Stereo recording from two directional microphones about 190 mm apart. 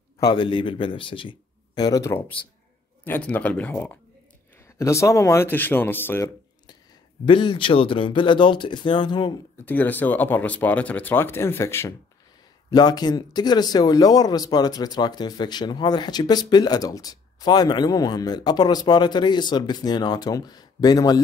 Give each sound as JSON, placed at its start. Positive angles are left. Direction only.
{"t": 0.2, "sound": "speech", "side_deg": 25}
{"t": 9.7, "sound": "speech", "side_deg": 10}